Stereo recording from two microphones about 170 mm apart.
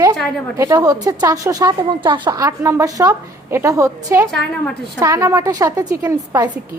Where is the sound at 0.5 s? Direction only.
15° right (ahead or behind).